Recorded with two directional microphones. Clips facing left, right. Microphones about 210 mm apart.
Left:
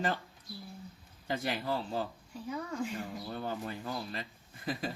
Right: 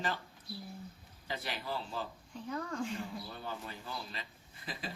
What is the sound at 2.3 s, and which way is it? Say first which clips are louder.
Speech: left 1 dB; 10° left (ahead or behind).